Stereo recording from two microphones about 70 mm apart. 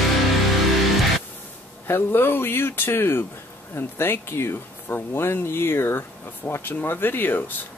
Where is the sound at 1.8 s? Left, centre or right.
Left.